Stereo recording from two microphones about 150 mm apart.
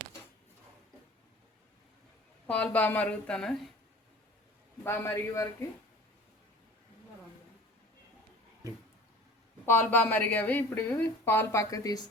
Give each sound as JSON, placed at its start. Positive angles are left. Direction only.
{"t": 2.5, "sound": "a woman's voice", "side_deg": 10}
{"t": 4.8, "sound": "a woman's voice", "side_deg": 15}
{"t": 9.6, "sound": "a woman's voice", "side_deg": 15}